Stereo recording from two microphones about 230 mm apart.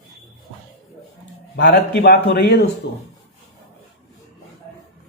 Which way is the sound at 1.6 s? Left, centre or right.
Left.